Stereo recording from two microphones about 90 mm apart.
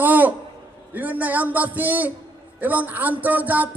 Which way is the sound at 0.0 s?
20° right (ahead or behind).